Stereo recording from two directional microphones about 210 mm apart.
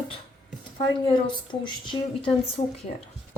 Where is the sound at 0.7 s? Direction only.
20° left (ahead or behind).